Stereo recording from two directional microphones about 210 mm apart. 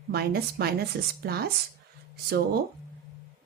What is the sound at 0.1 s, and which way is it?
A woman's voice, 50° right (ahead or behind).